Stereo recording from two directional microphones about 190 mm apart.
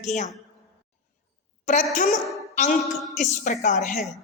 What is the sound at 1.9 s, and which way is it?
Speech, 45° left (ahead or behind).